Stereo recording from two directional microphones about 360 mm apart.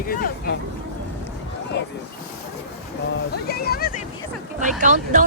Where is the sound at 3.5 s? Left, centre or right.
Left.